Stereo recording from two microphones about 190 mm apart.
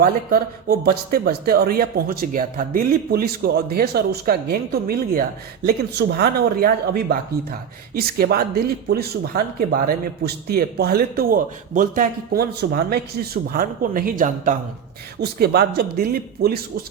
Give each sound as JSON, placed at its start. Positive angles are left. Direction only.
{"t": 0.0, "sound": "speech", "side_deg": -50}
{"t": 15.2, "sound": "speech", "side_deg": -55}